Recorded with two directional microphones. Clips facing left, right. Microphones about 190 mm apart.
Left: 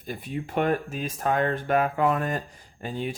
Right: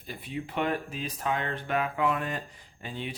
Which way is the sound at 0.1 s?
45° left (ahead or behind).